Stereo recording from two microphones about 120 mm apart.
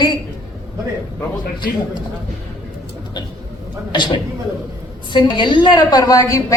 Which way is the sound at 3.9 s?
40° left (ahead or behind).